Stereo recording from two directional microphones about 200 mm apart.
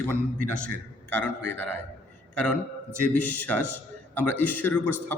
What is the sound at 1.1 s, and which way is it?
A man's voice, 5° left (ahead or behind).